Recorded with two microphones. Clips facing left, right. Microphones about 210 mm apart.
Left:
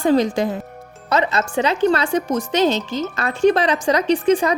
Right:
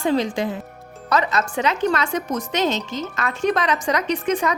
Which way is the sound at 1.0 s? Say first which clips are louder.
Left 2 dB; 25° left (ahead or behind).